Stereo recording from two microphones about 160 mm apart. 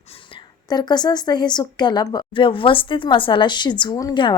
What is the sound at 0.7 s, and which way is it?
Speech, 25° left (ahead or behind).